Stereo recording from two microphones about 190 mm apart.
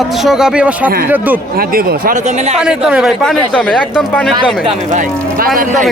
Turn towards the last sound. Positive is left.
turn(degrees=-45)  # may be behind; listen again after turning